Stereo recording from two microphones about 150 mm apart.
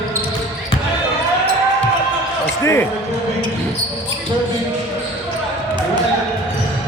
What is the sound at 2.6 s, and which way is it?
Speech, 20° left (ahead or behind).